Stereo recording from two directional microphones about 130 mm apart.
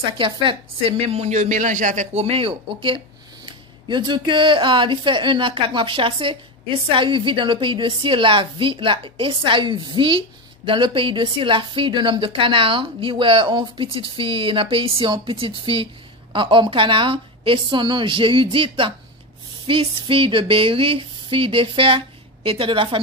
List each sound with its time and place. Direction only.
0.2 s a woman's voice: 45° right (ahead or behind); by 2.2 s 70° right (ahead or behind)
2.2 s speech: 45° right (ahead or behind)